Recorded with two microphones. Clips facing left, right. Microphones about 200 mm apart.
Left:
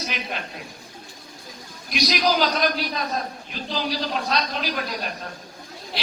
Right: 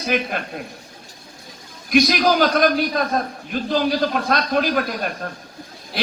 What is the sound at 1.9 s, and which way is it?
A man's voice, 50° right (ahead or behind).